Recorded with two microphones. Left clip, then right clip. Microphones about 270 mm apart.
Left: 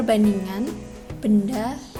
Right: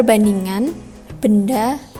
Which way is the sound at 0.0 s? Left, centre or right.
Right.